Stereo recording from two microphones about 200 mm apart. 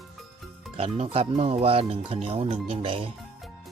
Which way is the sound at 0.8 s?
30° right (ahead or behind).